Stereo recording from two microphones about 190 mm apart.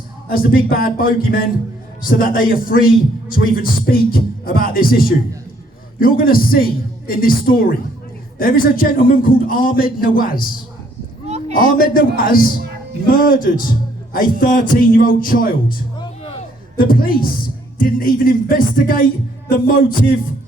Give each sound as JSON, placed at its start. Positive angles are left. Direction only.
{"t": 0.3, "sound": "speech", "side_deg": 50}
{"t": 11.3, "sound": "a sound", "side_deg": -35}
{"t": 11.8, "sound": "speech", "side_deg": 50}
{"t": 16.7, "sound": "speech", "side_deg": 50}